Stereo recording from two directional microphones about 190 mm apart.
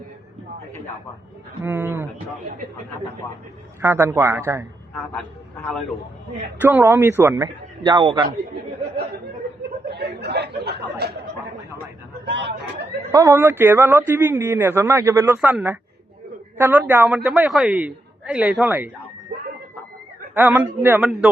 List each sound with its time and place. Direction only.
1.6 s a man's voice: 10° right (ahead or behind)
3.8 s a man's voice: 15° right (ahead or behind)
6.6 s a man's voice: 10° right (ahead or behind)
9.9 s speech: 60° right (ahead or behind)
13.1 s a man's voice: 15° right (ahead or behind)
20.3 s a man's voice: 10° right (ahead or behind)